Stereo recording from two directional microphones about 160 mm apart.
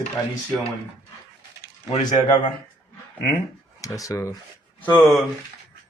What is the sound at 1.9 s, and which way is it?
Speech, 40° left (ahead or behind).